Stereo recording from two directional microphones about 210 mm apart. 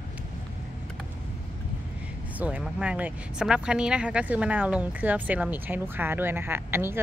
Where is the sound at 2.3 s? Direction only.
5° right (ahead or behind).